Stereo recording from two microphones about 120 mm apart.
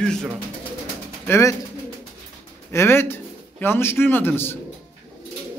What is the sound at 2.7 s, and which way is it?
A man's voice, 20° left (ahead or behind).